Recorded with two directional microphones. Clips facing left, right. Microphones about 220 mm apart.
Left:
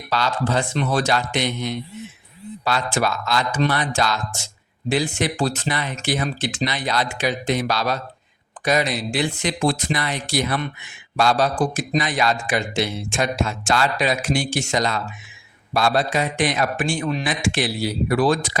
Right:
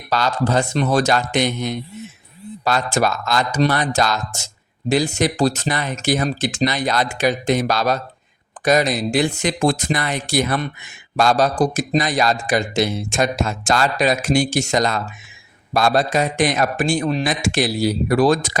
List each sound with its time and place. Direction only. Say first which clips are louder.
0.1 s speech: right 3 dB; 45° right (ahead or behind)